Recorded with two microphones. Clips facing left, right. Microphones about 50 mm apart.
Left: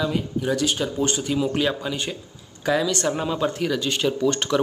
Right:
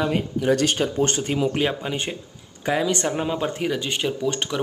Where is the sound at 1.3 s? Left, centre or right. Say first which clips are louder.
Even; right.